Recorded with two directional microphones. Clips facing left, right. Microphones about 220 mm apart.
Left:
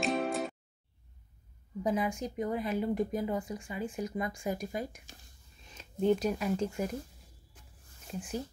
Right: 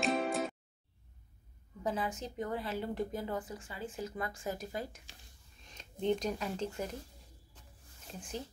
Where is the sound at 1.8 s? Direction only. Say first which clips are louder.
Left 5 dB; 15° left (ahead or behind).